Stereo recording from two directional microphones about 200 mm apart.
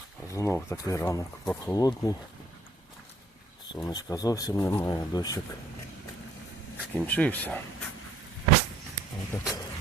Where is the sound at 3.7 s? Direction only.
20° left (ahead or behind).